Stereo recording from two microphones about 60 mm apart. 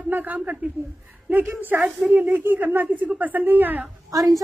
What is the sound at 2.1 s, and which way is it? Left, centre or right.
Speech, right.